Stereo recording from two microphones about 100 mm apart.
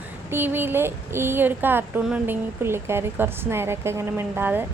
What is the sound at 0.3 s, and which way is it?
A woman's voice, 20° right (ahead or behind).